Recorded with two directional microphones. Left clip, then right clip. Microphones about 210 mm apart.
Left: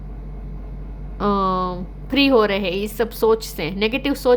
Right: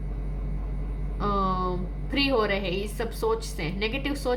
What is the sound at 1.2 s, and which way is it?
A woman's voice, 50° left (ahead or behind).